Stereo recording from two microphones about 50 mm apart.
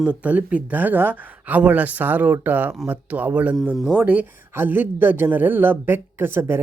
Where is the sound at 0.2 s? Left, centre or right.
Right.